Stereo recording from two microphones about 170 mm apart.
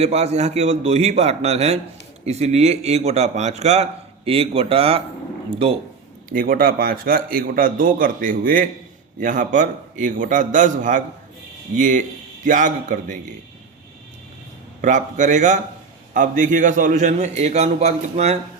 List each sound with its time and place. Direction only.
0.0 s a man's voice: 40° right (ahead or behind)
6.2 s a man's voice: 55° right (ahead or behind)
14.8 s a man's voice: 45° right (ahead or behind)